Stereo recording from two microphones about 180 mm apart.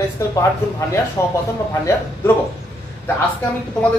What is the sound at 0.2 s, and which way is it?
Speech, 15° left (ahead or behind).